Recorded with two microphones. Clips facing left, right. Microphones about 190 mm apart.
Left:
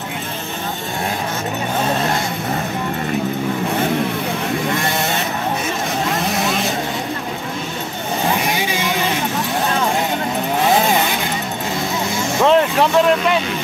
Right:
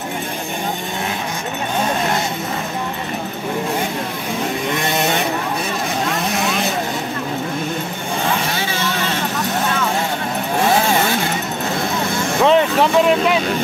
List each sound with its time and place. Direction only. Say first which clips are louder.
4.7 s vehicle: right 1 dB; 20° right (ahead or behind)
8.5 s vehicle: left 2 dB; 15° left (ahead or behind)
12.4 s vehicle: even; centre (ahead or behind)